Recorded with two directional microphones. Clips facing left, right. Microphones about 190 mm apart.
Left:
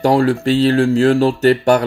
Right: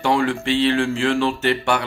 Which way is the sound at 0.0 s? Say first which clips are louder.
Left 6 dB; 40° left (ahead or behind).